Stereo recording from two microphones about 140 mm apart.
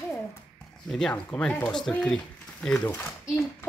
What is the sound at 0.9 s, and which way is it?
A child's voice, 5° left (ahead or behind).